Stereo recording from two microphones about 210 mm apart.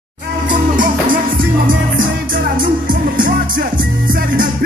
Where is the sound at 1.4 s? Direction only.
40° right (ahead or behind).